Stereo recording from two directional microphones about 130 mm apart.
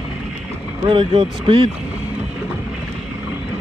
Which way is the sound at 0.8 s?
40° right (ahead or behind).